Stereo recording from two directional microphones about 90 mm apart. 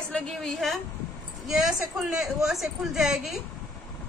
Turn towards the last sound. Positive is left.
turn(degrees=-5)  # may be behind; listen again after turning